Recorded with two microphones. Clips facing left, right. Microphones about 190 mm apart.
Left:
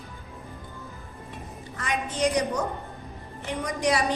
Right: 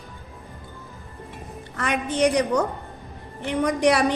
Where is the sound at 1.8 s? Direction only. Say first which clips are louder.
Right 5 dB; 65° right (ahead or behind).